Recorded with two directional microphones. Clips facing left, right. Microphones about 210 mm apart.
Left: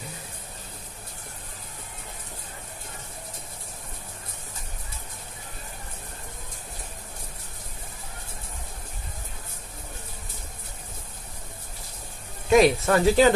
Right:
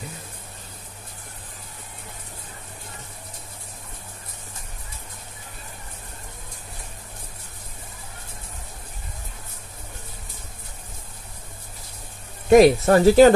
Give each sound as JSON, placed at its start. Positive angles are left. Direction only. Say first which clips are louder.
{"t": 12.4, "sound": "speech", "louder": "right 5 dB", "side_deg": -35}